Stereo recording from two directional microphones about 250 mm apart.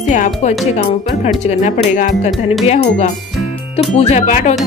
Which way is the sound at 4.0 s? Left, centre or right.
Left.